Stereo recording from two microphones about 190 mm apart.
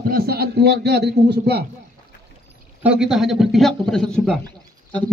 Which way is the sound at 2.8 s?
5° right (ahead or behind).